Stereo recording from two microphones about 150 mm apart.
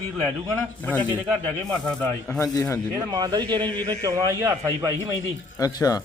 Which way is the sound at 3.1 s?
25° right (ahead or behind).